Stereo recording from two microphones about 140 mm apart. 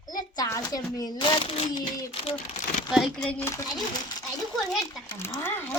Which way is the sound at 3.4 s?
20° left (ahead or behind).